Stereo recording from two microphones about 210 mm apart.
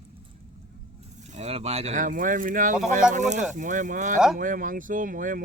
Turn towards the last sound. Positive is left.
turn(degrees=-40)  # may be behind; listen again after turning